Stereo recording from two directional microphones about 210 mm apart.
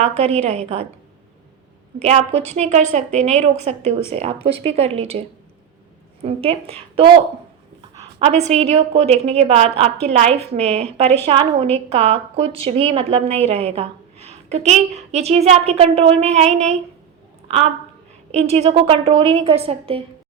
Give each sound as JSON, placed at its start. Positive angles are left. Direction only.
{"t": 0.0, "sound": "a woman's voice", "side_deg": -30}
{"t": 2.0, "sound": "a woman's voice", "side_deg": -30}
{"t": 6.2, "sound": "a woman's voice", "side_deg": -30}
{"t": 8.2, "sound": "a woman's voice", "side_deg": -30}
{"t": 18.3, "sound": "a woman's voice", "side_deg": -30}